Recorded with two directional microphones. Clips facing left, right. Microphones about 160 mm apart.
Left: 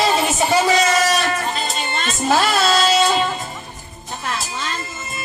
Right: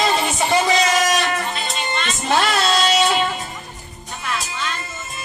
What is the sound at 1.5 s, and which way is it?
Music, 45° left (ahead or behind).